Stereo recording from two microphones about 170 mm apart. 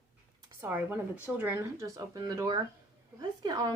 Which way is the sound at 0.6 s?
10° right (ahead or behind).